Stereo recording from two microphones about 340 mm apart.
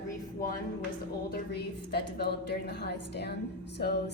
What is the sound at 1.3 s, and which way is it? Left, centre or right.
A woman's voice, left.